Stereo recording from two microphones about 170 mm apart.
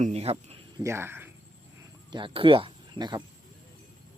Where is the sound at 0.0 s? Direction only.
35° right (ahead or behind).